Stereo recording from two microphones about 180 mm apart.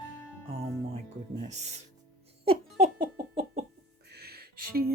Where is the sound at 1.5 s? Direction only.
40° right (ahead or behind).